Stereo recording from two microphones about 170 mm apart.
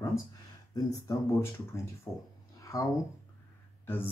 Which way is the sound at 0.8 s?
15° left (ahead or behind).